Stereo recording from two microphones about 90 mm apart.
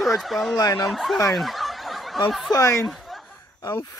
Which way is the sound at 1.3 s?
Centre (ahead or behind).